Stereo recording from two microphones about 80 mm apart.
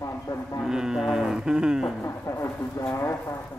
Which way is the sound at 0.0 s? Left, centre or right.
Left.